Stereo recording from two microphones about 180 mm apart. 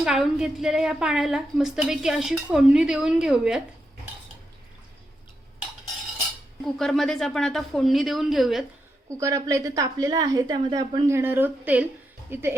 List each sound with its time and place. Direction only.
0.0 s a woman's voice: 5° right (ahead or behind)
6.7 s a woman's voice: centre (ahead or behind)
9.1 s a woman's voice: 15° right (ahead or behind)
11.1 s a woman's voice: 10° right (ahead or behind)